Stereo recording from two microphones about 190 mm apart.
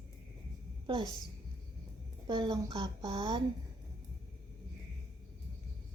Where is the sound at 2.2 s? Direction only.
25° right (ahead or behind).